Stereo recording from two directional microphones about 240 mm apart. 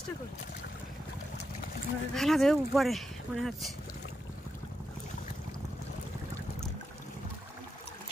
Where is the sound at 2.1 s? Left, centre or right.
Centre.